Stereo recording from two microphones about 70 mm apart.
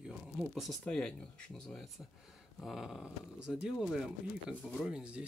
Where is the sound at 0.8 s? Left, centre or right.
Centre.